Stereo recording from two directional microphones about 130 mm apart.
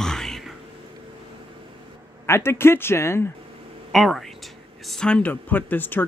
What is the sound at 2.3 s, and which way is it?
Speech, 20° left (ahead or behind).